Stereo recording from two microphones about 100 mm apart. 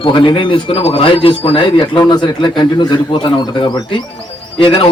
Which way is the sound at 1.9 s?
45° left (ahead or behind).